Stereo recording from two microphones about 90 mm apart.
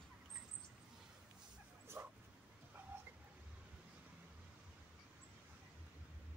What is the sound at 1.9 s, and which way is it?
Dog, 30° right (ahead or behind).